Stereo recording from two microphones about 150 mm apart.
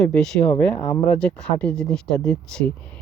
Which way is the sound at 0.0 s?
5° left (ahead or behind).